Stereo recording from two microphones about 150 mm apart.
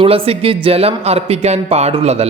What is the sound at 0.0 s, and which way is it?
Speech, 40° right (ahead or behind).